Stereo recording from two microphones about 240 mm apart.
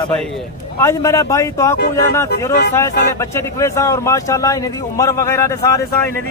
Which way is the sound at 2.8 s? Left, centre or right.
Centre.